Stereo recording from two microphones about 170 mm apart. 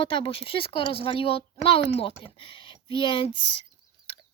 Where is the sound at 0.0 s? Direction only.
30° left (ahead or behind).